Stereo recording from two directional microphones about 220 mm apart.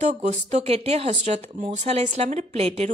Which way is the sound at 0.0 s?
30° right (ahead or behind).